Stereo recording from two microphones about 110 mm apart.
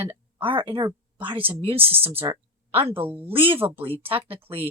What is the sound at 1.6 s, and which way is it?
Speech, 60° right (ahead or behind).